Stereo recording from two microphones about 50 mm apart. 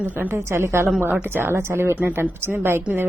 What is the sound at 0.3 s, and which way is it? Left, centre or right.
Speech, right.